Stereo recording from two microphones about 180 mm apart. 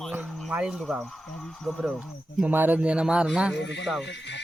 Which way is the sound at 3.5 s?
80° left.